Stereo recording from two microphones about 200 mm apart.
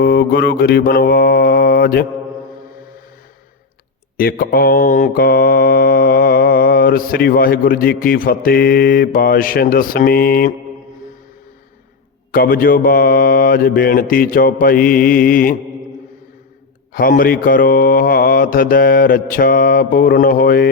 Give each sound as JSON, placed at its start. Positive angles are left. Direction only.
{"t": 0.0, "sound": "mantra", "side_deg": 55}
{"t": 4.2, "sound": "mantra", "side_deg": 50}
{"t": 12.3, "sound": "mantra", "side_deg": 45}
{"t": 16.9, "sound": "mantra", "side_deg": 45}